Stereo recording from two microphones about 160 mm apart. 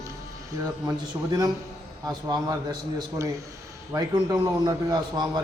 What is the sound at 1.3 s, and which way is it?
A man's voice, 25° right (ahead or behind).